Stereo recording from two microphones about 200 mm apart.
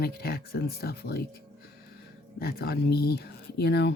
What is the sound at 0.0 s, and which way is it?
Speech, 50° left (ahead or behind).